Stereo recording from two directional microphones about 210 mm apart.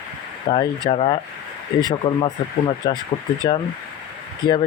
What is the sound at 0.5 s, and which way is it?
Speech, 25° left (ahead or behind).